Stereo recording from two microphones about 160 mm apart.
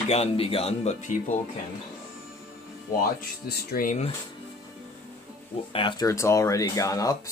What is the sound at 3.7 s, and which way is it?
Speech, 60° left (ahead or behind).